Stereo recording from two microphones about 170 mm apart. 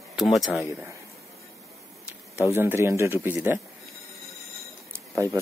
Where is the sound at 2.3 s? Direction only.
15° right (ahead or behind).